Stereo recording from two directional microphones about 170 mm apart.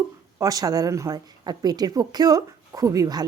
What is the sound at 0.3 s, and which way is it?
A woman's voice, 20° right (ahead or behind).